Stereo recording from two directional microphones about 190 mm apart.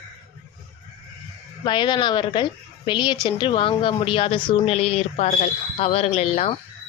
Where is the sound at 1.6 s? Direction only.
25° left (ahead or behind).